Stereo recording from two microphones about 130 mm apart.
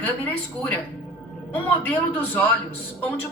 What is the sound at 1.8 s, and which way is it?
Speech, 15° left (ahead or behind).